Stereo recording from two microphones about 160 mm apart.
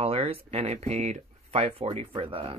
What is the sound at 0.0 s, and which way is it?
Speech, 35° right (ahead or behind).